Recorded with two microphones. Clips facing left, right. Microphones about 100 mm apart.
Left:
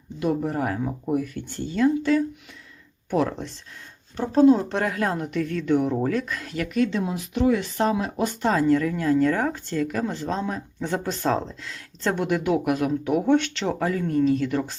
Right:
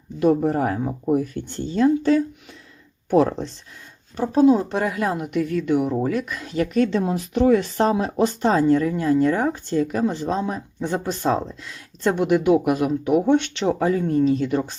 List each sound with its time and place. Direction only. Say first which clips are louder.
0.2 s speech: right 6 dB; 35° right (ahead or behind)
4.2 s speech: right 1 dB; 10° right (ahead or behind)
6.8 s speech: right 4 dB; 40° right (ahead or behind); by 14.8 s 20° right (ahead or behind)